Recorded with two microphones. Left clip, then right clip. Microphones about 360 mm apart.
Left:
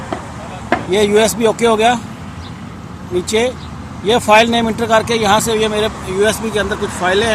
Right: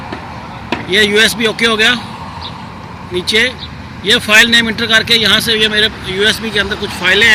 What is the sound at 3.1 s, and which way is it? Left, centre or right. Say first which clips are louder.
Speech: right 3 dB; centre.